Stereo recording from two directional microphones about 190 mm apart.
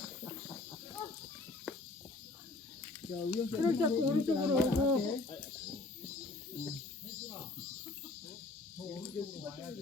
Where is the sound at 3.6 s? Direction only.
15° right (ahead or behind).